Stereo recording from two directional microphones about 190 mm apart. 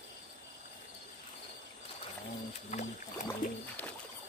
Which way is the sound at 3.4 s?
45° left (ahead or behind).